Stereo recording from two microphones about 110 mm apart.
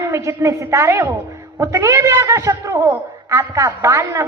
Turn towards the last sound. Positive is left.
turn(degrees=-25)  # may be behind; listen again after turning